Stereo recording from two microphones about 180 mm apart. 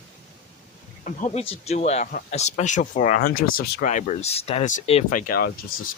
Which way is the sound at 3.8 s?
45° left (ahead or behind).